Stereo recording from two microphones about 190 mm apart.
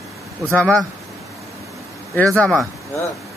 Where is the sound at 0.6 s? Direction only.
5° left (ahead or behind).